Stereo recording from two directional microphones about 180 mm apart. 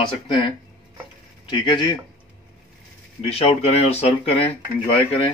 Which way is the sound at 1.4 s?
25° left (ahead or behind).